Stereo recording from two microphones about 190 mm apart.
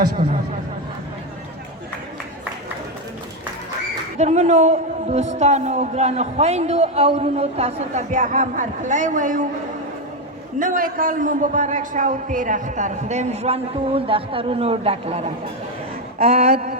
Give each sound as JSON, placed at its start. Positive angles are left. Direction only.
{"t": 4.2, "sound": "a man's voice", "side_deg": -35}
{"t": 10.6, "sound": "a man's voice", "side_deg": -45}